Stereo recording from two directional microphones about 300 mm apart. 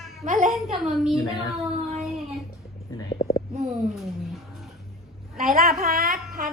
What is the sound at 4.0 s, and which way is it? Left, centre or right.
Music, centre.